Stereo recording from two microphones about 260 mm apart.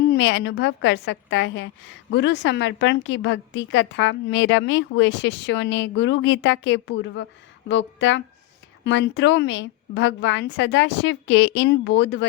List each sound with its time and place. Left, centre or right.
0.1 s a woman's voice: left